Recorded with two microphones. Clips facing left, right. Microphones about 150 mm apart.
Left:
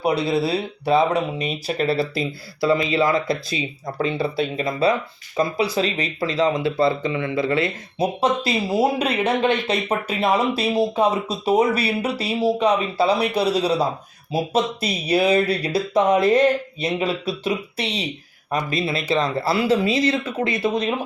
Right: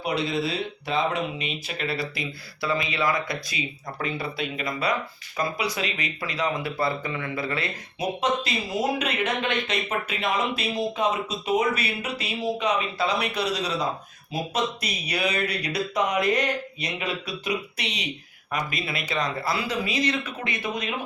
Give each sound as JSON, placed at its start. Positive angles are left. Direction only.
{"t": 0.0, "sound": "speech", "side_deg": 35}